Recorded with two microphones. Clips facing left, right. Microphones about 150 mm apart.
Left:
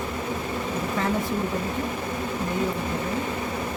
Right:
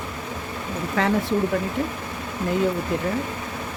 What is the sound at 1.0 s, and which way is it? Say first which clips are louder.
Speech: right 5 dB; 90° right.